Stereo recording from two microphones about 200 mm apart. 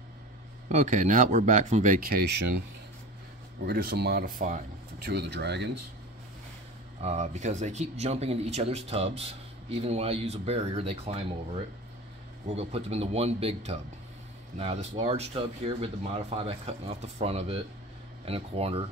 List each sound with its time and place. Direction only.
0.7 s speech: 35° right (ahead or behind); by 2.5 s 55° right (ahead or behind)
3.6 s speech: 50° right (ahead or behind)
7.0 s speech: 35° right (ahead or behind)
12.4 s speech: 30° right (ahead or behind)